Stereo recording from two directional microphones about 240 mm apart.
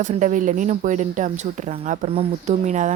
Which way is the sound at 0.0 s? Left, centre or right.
Right.